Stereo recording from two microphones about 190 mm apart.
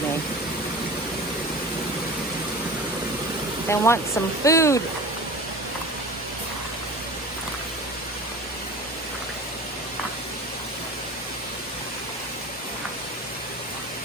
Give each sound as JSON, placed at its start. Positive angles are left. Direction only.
{"t": 3.7, "sound": "speech", "side_deg": 15}